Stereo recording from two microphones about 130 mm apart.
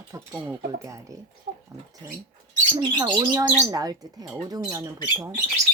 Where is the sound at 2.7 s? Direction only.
35° right (ahead or behind).